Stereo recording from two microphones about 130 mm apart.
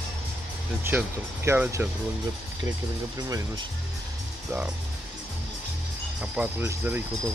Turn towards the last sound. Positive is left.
turn(degrees=-10)  # may be behind; listen again after turning